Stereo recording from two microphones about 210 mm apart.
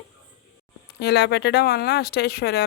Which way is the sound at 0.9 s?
50° left (ahead or behind).